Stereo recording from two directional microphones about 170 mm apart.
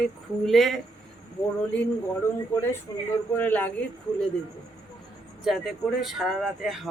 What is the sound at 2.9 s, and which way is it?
Speech, 20° left (ahead or behind).